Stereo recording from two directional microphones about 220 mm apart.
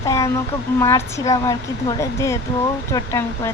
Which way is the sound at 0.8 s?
15° left (ahead or behind).